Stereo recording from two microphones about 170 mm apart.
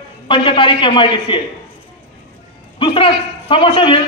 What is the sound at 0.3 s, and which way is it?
A man's voice, 30° left (ahead or behind).